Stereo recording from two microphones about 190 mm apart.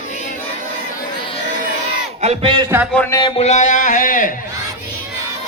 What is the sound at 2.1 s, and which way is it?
Speech, 35° right (ahead or behind).